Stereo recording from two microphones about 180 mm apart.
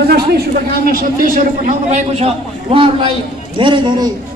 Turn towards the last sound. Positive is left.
turn(degrees=-25)  # may be behind; listen again after turning